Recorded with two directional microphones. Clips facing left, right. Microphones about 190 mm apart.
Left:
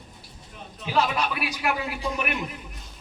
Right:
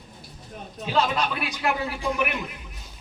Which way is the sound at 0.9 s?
10° left (ahead or behind).